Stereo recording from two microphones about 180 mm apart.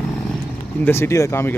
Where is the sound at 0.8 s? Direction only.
15° left (ahead or behind).